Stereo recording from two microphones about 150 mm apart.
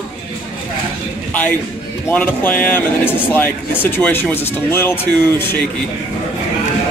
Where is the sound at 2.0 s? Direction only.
10° left (ahead or behind).